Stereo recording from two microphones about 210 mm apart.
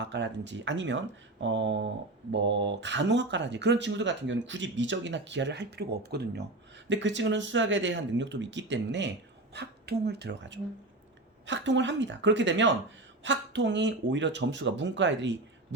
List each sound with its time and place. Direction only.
0.0 s speech: 55° right (ahead or behind)